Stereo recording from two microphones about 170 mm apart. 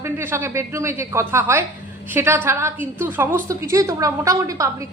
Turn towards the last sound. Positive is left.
turn(degrees=-20)  # may be behind; listen again after turning